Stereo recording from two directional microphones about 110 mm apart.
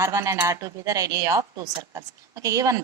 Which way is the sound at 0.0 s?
25° right (ahead or behind).